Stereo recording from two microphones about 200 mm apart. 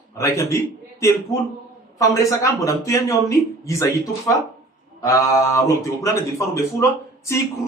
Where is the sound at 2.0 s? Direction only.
15° left (ahead or behind).